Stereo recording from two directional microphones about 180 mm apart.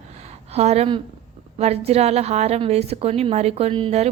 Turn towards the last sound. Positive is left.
turn(degrees=-35)  # may be behind; listen again after turning